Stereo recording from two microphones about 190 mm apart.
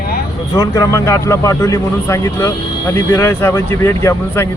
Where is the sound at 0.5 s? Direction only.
20° left (ahead or behind).